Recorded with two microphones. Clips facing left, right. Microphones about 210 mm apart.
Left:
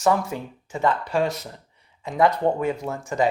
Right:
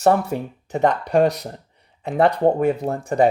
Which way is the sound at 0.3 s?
60° right (ahead or behind).